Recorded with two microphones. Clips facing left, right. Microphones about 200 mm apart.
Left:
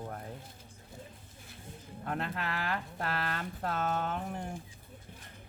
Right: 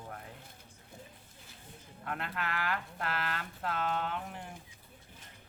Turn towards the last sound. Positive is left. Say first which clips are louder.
# left 3 dB
turn(degrees=40)  # may be behind; listen again after turning